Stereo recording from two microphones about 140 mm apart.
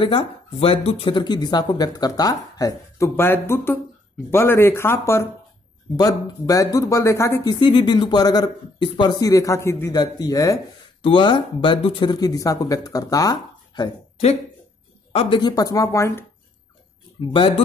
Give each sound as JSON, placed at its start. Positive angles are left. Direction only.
{"t": 0.0, "sound": "speech", "side_deg": 40}
{"t": 7.6, "sound": "speech", "side_deg": 35}
{"t": 9.2, "sound": "speech", "side_deg": 25}
{"t": 11.0, "sound": "speech", "side_deg": 35}
{"t": 15.1, "sound": "speech", "side_deg": 35}